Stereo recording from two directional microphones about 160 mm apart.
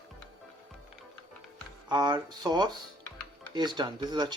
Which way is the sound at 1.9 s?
25° right (ahead or behind).